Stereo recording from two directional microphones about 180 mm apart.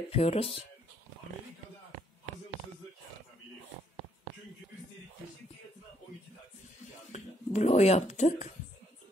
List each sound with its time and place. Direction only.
0.1 s speech: 30° left (ahead or behind)
7.1 s speech: 40° left (ahead or behind)